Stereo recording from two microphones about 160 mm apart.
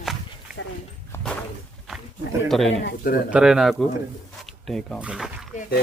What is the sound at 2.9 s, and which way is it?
Speech, 65° left (ahead or behind).